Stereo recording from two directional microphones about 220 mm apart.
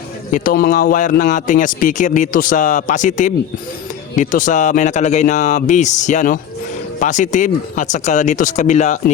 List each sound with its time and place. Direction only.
0.3 s speech: 40° left (ahead or behind)